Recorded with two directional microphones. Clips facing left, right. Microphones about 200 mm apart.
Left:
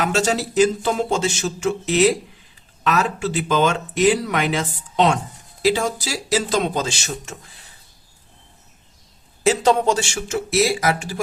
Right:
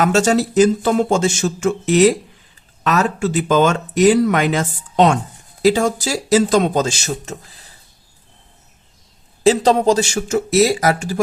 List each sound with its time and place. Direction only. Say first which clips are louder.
0.0 s speech: right 6 dB; 45° right (ahead or behind)
9.4 s speech: right 4 dB; 35° right (ahead or behind)